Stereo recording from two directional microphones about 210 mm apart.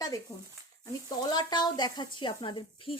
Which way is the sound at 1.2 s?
20° left (ahead or behind).